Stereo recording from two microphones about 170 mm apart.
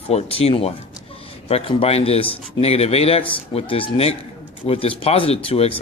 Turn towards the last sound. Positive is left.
turn(degrees=35)  # may be behind; listen again after turning